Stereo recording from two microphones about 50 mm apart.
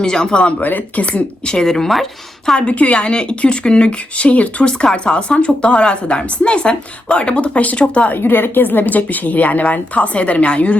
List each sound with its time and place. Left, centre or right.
0.0 s speech: centre
0.6 s speech: left
1.5 s speech: centre
2.6 s speech: left
8.2 s speech: left